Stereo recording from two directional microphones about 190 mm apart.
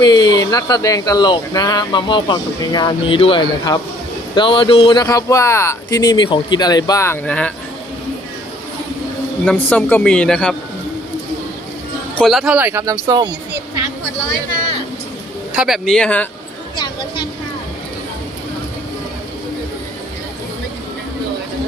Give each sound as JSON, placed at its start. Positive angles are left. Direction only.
{"t": 0.0, "sound": "speech", "side_deg": 20}
{"t": 9.5, "sound": "speech", "side_deg": 5}
{"t": 12.1, "sound": "speech", "side_deg": 0}
{"t": 15.5, "sound": "speech", "side_deg": 0}
{"t": 16.7, "sound": "speech", "side_deg": 25}